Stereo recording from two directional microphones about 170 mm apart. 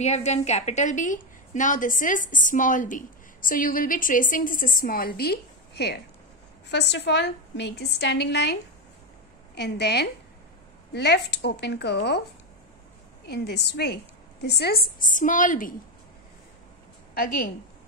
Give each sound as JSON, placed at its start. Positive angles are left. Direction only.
{"t": 0.0, "sound": "a woman's voice", "side_deg": 40}
{"t": 6.7, "sound": "a woman's voice", "side_deg": 90}
{"t": 9.6, "sound": "speech", "side_deg": 80}
{"t": 13.3, "sound": "a woman's voice", "side_deg": 80}
{"t": 17.1, "sound": "a woman's voice", "side_deg": 60}